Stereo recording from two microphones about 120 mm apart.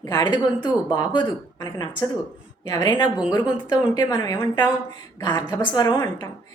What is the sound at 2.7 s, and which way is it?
A woman's voice, 30° left (ahead or behind).